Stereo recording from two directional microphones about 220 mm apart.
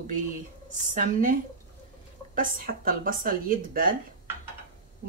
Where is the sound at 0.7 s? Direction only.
35° right (ahead or behind).